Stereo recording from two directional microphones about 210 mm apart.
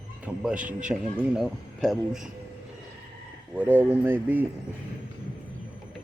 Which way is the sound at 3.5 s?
10° right (ahead or behind).